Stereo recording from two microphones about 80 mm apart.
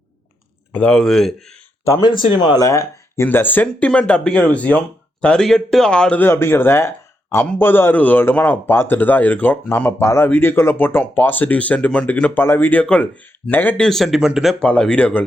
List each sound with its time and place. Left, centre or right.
0.7 s speech: centre
2.0 s speech: left
2.6 s speech: left
3.2 s speech: left
6.1 s a man's voice: left
12.8 s speech: centre
13.5 s a man's voice: left
13.7 s speech: centre
14.6 s speech: centre